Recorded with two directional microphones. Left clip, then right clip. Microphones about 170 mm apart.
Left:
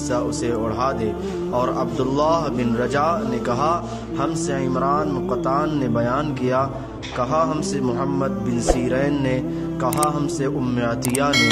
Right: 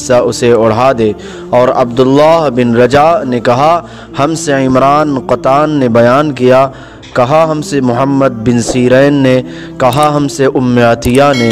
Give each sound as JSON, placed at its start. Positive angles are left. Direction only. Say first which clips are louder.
{"t": 0.1, "sound": "a man's voice", "louder": "right 16 dB", "side_deg": -55}
{"t": 7.5, "sound": "speech", "louder": "right 12 dB", "side_deg": -45}